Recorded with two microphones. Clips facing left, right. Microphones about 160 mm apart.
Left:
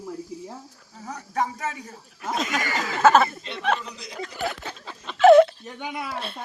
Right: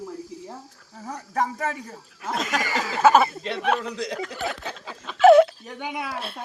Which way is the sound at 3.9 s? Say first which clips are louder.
Right 6 dB; 85° right.